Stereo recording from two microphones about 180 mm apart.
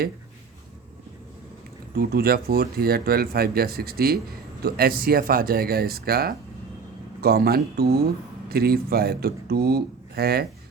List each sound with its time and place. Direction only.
2.0 s speech: 55° right (ahead or behind)